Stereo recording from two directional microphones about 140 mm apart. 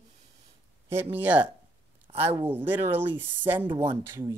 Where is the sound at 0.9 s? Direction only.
15° right (ahead or behind).